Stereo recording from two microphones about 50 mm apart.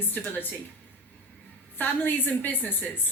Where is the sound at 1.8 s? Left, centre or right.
Left.